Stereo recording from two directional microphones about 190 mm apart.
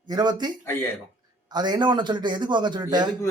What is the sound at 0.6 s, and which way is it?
Speech, 15° left (ahead or behind).